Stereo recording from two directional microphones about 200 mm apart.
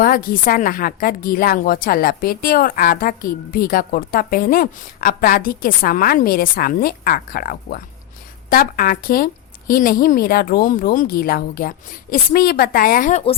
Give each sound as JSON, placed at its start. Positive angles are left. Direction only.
{"t": 0.0, "sound": "a woman's voice", "side_deg": 45}